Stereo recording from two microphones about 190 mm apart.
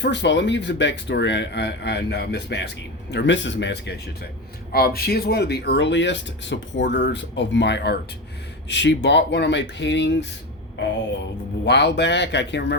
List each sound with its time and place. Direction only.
0.0 s speech: 70° left (ahead or behind)
11.6 s speech: 65° left (ahead or behind)